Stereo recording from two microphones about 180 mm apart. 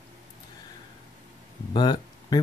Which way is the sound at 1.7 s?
25° left (ahead or behind).